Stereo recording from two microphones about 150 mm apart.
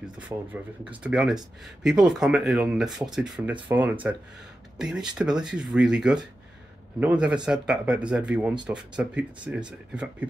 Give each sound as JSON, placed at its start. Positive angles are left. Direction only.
{"t": 0.3, "sound": "speech", "side_deg": -20}
{"t": 1.0, "sound": "speech", "side_deg": -5}